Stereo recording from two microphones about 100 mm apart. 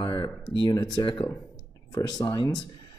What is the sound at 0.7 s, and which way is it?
Speech, 40° left (ahead or behind).